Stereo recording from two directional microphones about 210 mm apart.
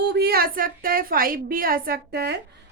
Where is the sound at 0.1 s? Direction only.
50° right (ahead or behind).